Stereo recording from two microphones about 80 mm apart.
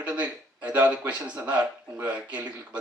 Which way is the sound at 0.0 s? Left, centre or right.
Centre.